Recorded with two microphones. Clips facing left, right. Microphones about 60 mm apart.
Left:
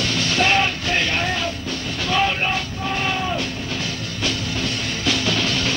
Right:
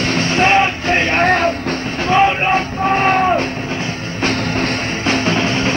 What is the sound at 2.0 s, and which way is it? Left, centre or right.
Music, right.